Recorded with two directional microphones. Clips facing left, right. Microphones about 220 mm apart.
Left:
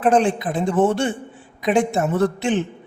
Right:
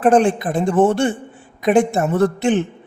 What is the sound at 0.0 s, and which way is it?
Speech, 50° right (ahead or behind).